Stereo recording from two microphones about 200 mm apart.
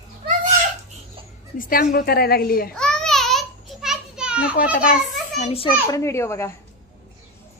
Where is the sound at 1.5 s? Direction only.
45° left (ahead or behind).